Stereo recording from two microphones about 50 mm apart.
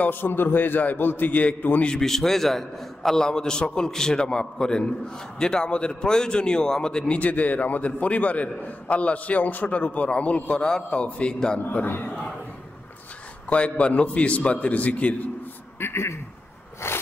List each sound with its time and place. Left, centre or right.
0.0 s a man's voice: left
2.0 s a man's voice: centre
7.2 s a man's voice: left
11.7 s a man's voice: left
13.5 s a man's voice: left
15.8 s speech: left
16.8 s a sound: left